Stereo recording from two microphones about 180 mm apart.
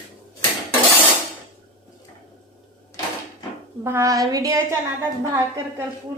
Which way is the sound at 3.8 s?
15° right (ahead or behind).